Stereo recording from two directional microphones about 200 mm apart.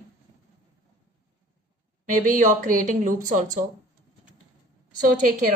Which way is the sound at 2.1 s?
40° right (ahead or behind).